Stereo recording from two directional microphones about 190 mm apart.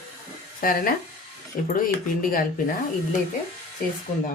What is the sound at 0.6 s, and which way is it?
Speech, 45° left (ahead or behind).